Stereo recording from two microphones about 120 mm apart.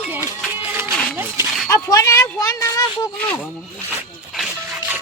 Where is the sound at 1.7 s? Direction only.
25° left (ahead or behind).